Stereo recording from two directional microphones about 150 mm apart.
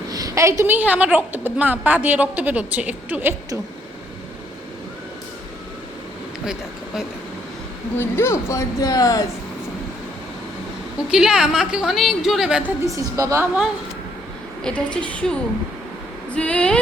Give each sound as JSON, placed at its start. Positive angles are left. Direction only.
{"t": 0.1, "sound": "a woman's voice", "side_deg": -25}
{"t": 6.4, "sound": "speech", "side_deg": -5}
{"t": 7.9, "sound": "speech", "side_deg": 15}
{"t": 11.1, "sound": "a woman's voice", "side_deg": -5}
{"t": 12.8, "sound": "a woman's voice", "side_deg": -20}
{"t": 14.6, "sound": "a woman's voice", "side_deg": 5}